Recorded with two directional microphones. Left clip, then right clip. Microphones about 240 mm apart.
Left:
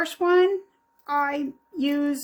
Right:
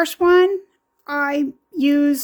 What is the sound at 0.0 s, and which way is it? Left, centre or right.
Speech, right.